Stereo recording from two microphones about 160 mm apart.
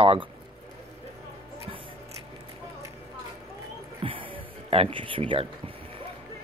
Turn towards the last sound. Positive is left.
turn(degrees=-35)  # may be behind; listen again after turning